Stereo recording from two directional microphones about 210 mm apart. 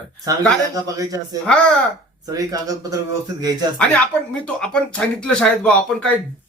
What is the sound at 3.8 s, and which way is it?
Speech, 5° left (ahead or behind).